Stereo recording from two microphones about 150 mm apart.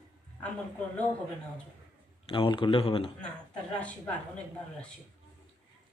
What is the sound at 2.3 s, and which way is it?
Speech, 35° left (ahead or behind).